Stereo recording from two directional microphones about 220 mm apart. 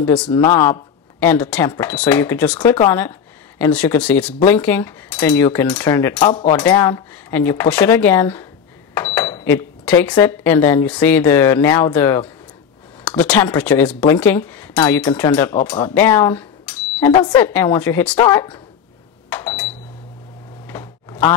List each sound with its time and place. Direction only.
0.0 s speech: 5° left (ahead or behind)
0.3 s cutlery: 15° left (ahead or behind)
2.9 s speech: 10° left (ahead or behind)
4.5 s cutlery: 10° left (ahead or behind)
8.9 s speech: 10° left (ahead or behind)
13.0 s cutlery: 5° left (ahead or behind)
15.6 s speech: 5° left (ahead or behind)
17.4 s cutlery: 10° left (ahead or behind)
19.2 s a sound: 5° left (ahead or behind)